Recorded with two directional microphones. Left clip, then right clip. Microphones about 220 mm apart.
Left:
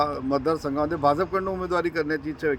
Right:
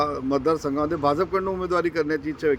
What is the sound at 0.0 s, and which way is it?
Speech, centre (ahead or behind).